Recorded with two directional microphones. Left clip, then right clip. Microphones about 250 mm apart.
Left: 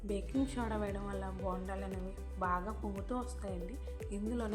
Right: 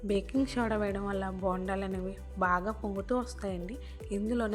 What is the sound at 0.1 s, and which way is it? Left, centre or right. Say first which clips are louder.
Speech: right 7 dB; right.